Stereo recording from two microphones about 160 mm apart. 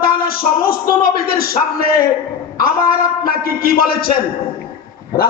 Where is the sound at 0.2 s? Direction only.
70° left (ahead or behind).